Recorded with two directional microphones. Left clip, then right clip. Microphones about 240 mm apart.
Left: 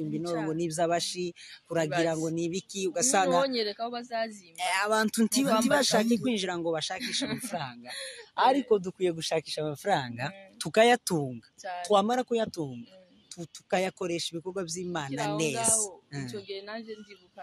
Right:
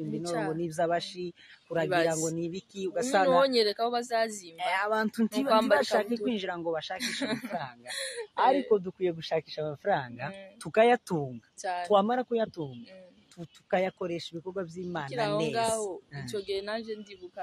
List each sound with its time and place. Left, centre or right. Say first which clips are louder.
0.2 s speech: right 1 dB; centre
0.5 s speech: left 2 dB; left
3.3 s speech: right 3 dB; centre
4.6 s speech: left 2 dB; left
5.5 s speech: right 3 dB; centre
5.8 s speech: left 1 dB; left
7.0 s speech: even; centre
8.4 s speech: left 1 dB; left
11.6 s speech: right 4 dB; centre
11.9 s speech: left 1 dB; left
15.5 s speech: right 2 dB; centre